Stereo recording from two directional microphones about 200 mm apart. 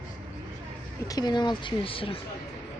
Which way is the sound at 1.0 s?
20° left (ahead or behind).